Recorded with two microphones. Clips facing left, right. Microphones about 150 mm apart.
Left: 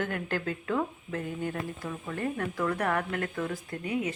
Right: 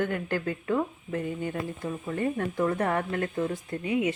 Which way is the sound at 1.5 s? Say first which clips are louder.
Right 3 dB; 25° right (ahead or behind).